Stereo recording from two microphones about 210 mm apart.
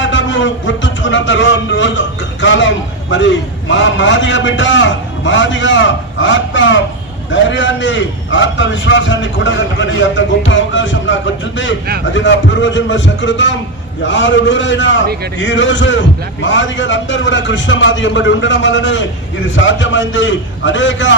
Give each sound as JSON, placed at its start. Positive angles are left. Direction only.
{"t": 0.0, "sound": "music", "side_deg": 60}
{"t": 7.3, "sound": "a man's voice", "side_deg": 60}